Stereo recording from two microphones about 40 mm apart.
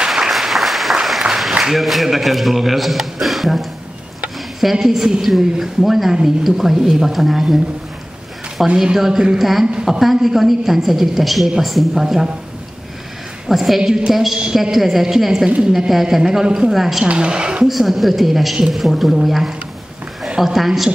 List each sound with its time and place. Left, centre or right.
0.1 s applause: centre
1.6 s a man's voice: centre
8.6 s a man's voice: centre
13.5 s a woman's voice: centre
16.7 s a man's voice: centre
17.0 s a woman's voice: right
17.6 s a man's voice: centre